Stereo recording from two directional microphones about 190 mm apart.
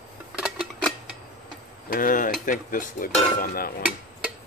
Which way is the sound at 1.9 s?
45° left (ahead or behind).